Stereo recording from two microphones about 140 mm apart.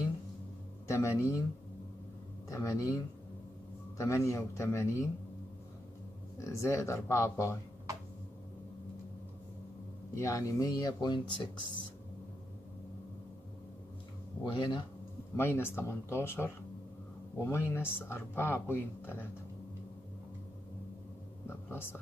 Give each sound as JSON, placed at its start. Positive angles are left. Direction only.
{"t": 0.8, "sound": "speech", "side_deg": 20}
{"t": 2.5, "sound": "speech", "side_deg": 25}
{"t": 4.0, "sound": "speech", "side_deg": 20}
{"t": 6.4, "sound": "speech", "side_deg": 20}
{"t": 10.1, "sound": "speech", "side_deg": 20}
{"t": 14.4, "sound": "speech", "side_deg": 35}
{"t": 15.3, "sound": "speech", "side_deg": 15}
{"t": 21.5, "sound": "a sound", "side_deg": 15}